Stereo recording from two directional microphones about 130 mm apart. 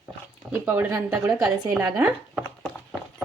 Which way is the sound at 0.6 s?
15° right (ahead or behind).